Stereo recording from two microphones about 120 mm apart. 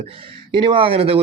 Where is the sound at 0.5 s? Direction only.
45° right (ahead or behind).